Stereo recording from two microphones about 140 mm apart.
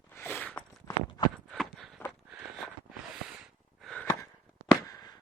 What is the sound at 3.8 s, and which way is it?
Gasp, 5° left (ahead or behind).